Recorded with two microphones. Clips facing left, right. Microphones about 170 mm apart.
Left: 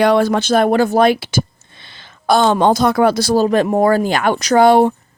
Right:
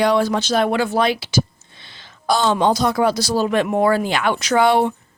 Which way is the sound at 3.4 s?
40° left (ahead or behind).